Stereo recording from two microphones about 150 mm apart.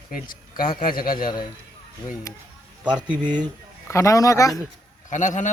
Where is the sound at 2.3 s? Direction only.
20° left (ahead or behind).